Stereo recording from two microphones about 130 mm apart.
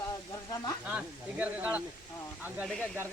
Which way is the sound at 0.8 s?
10° right (ahead or behind).